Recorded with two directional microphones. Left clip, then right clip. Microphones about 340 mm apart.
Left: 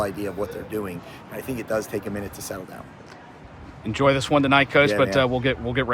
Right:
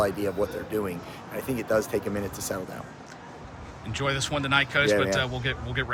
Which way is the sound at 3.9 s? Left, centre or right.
Centre.